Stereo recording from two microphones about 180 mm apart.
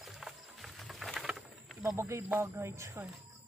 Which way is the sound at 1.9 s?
15° right (ahead or behind).